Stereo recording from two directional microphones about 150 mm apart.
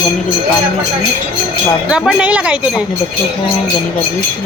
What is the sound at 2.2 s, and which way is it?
Speech, 10° right (ahead or behind).